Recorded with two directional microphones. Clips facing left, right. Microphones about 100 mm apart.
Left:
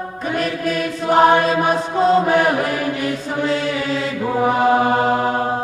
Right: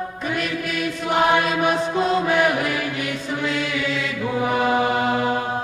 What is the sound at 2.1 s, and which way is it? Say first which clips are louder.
Chant: left 5 dB; 40° left (ahead or behind).